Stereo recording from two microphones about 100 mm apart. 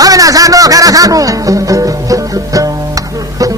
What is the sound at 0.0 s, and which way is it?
Music, 35° right (ahead or behind).